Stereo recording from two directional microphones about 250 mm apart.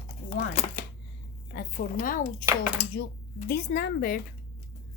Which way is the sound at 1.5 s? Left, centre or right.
Left.